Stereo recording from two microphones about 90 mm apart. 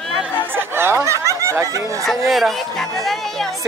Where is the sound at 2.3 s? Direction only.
Centre (ahead or behind).